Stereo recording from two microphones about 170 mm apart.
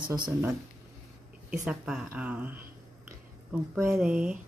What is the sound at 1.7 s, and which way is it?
Speech, 5° right (ahead or behind).